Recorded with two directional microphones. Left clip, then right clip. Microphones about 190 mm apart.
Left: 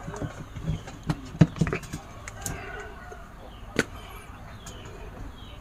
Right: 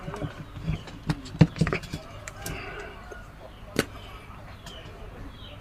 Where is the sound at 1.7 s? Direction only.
10° right (ahead or behind).